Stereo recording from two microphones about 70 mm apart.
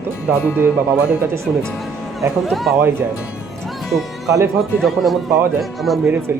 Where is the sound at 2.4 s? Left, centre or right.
Centre.